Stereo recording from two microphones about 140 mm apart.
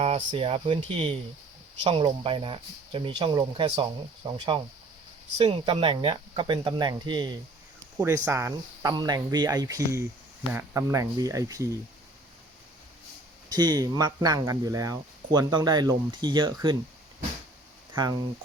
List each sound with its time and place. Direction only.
0.0 s speech: 45° right (ahead or behind)
7.9 s speech: 20° right (ahead or behind)
13.5 s speech: 30° right (ahead or behind)